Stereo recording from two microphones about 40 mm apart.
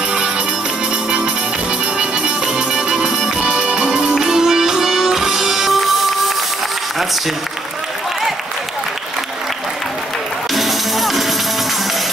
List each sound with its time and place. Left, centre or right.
2.0 s music: right; by 6.3 s centre
10.5 s music: centre